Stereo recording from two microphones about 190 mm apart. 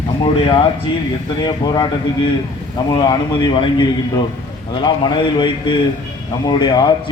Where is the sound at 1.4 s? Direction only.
20° left (ahead or behind).